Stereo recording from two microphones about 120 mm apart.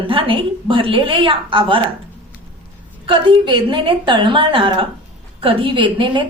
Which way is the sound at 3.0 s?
45° right (ahead or behind).